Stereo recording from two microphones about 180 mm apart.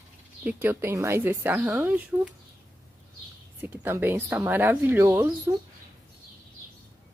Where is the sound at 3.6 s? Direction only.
10° right (ahead or behind).